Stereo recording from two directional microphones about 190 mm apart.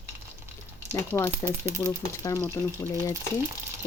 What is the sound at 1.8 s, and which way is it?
Speech, 15° left (ahead or behind).